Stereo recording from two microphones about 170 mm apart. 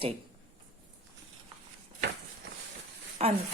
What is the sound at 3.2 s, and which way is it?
Speech, 40° right (ahead or behind).